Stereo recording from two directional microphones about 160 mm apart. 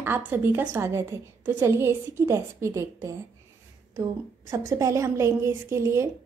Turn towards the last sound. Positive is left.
turn(degrees=-15)  # may be behind; listen again after turning